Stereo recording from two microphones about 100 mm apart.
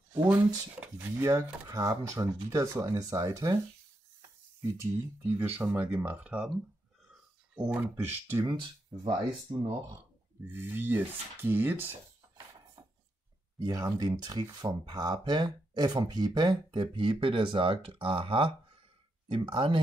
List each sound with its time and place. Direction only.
0.3 s speech: 15° right (ahead or behind)
1.1 s speech: 30° right (ahead or behind)
4.6 s speech: 35° right (ahead or behind)
5.6 s speech: 20° right (ahead or behind)
7.6 s speech: 20° right (ahead or behind)
8.5 s speech: 50° right (ahead or behind)
10.5 s speech: 20° right (ahead or behind)
13.6 s speech: 40° right (ahead or behind); by 18.5 s 65° right (ahead or behind)
19.2 s speech: 55° right (ahead or behind)